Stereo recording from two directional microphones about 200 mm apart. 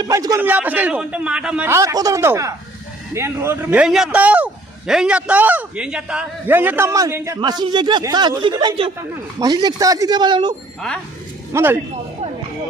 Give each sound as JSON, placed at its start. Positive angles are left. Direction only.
{"t": 0.0, "sound": "a man's voice", "side_deg": -20}
{"t": 11.5, "sound": "a man's voice", "side_deg": -10}